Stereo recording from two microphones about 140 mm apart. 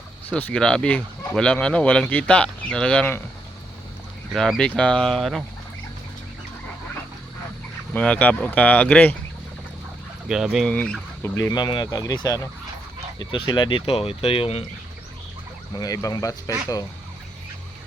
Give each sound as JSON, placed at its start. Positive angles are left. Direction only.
{"t": 0.3, "sound": "speech", "side_deg": 10}
{"t": 4.3, "sound": "speech", "side_deg": 5}
{"t": 7.9, "sound": "speech", "side_deg": 10}
{"t": 10.2, "sound": "speech", "side_deg": -5}
{"t": 10.7, "sound": "speech", "side_deg": 5}
{"t": 11.2, "sound": "speech", "side_deg": 20}
{"t": 15.7, "sound": "speech", "side_deg": 25}